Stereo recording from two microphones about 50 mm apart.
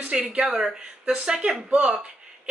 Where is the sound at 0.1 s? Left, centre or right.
Right.